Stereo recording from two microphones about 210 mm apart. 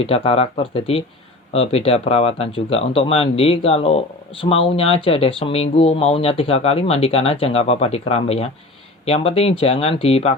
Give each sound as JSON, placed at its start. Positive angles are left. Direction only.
{"t": 0.0, "sound": "speech", "side_deg": 25}